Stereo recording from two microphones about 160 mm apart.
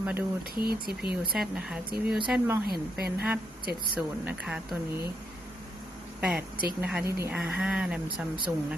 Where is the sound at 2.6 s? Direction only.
75° right (ahead or behind).